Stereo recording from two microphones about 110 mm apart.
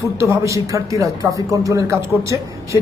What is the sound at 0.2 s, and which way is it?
Speech, 25° right (ahead or behind).